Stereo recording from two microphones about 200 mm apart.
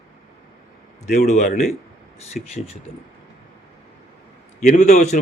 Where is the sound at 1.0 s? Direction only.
35° left (ahead or behind).